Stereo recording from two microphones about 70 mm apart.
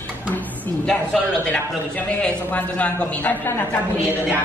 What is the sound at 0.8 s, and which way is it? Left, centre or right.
A man's voice, centre.